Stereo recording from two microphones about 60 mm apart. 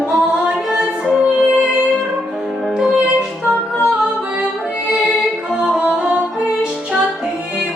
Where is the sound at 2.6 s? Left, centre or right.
Centre.